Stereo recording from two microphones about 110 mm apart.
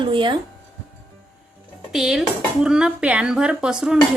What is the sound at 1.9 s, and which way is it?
A woman's voice, 5° right (ahead or behind).